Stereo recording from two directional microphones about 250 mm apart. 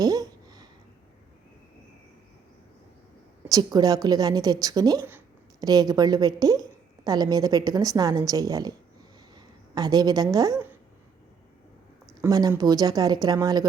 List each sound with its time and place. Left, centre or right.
0.0 s a sound: centre
3.5 s a woman's voice: centre
12.2 s speech: centre